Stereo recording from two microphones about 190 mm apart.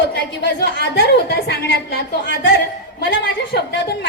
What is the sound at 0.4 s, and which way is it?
A woman's voice, 60° left (ahead or behind).